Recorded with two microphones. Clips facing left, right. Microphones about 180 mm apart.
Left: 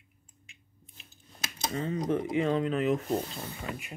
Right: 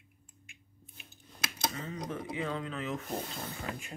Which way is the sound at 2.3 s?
60° left (ahead or behind).